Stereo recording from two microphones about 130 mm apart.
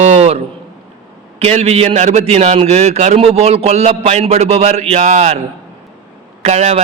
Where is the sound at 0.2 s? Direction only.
55° right (ahead or behind).